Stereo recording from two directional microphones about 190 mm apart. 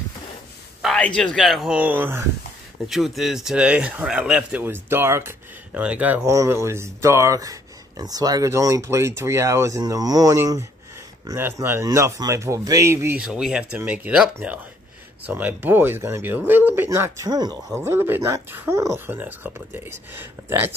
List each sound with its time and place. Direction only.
0.8 s speech: 5° left (ahead or behind)